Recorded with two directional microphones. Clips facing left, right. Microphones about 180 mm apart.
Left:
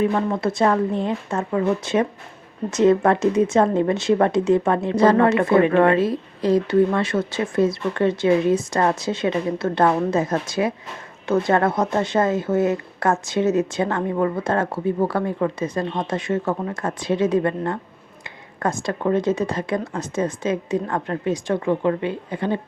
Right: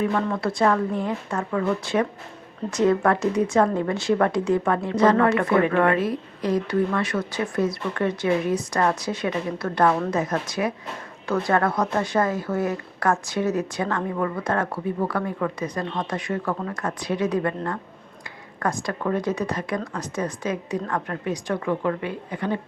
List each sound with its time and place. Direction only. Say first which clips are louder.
0.0 s speech: left 3 dB; 25° left (ahead or behind)